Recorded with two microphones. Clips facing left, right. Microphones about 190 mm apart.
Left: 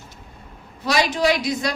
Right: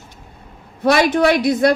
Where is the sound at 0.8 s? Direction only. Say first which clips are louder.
Right 6 dB; 55° right (ahead or behind).